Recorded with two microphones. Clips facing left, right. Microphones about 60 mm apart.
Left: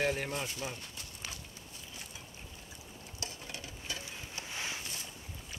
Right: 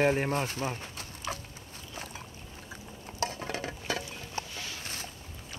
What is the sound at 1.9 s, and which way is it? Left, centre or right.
Boat, right.